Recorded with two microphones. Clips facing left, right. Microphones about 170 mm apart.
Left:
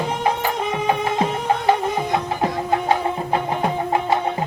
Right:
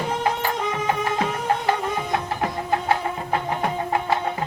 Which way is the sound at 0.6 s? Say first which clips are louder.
Left 4 dB; 20° left (ahead or behind).